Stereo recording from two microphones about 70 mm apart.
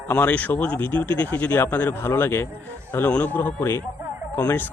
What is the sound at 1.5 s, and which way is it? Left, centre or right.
Speech, left.